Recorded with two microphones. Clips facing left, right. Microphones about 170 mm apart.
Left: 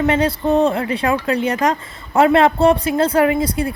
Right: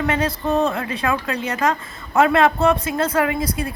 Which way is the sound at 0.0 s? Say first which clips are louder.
Left 5 dB; 30° left (ahead or behind).